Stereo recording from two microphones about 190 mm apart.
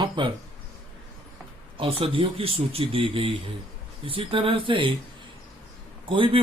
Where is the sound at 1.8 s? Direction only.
30° right (ahead or behind).